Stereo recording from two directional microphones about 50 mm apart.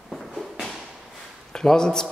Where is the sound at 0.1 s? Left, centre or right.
Centre.